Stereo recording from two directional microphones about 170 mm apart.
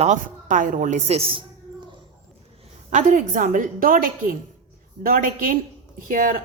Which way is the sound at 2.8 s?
45° right (ahead or behind).